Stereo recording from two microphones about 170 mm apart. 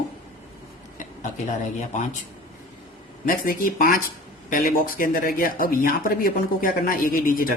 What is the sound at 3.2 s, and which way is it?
Speech, 60° left (ahead or behind).